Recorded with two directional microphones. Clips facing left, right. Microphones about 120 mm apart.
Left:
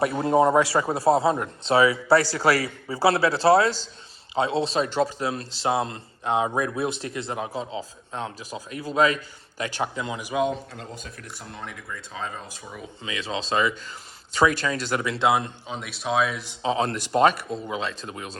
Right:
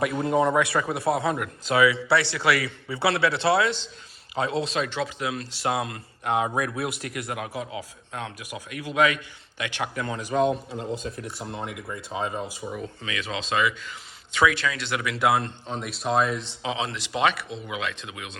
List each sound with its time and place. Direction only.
0.0 s speech: 35° left (ahead or behind)
9.9 s speech: 15° left (ahead or behind)
10.7 s speech: 20° right (ahead or behind)
13.0 s speech: 30° left (ahead or behind)
15.3 s speech: 15° left (ahead or behind)
15.6 s speech: centre (ahead or behind)
16.6 s speech: 45° left (ahead or behind)